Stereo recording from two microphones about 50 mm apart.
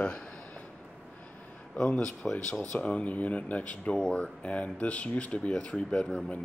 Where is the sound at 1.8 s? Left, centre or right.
Centre.